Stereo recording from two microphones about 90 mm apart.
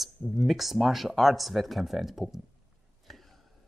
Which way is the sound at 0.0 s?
Centre (ahead or behind).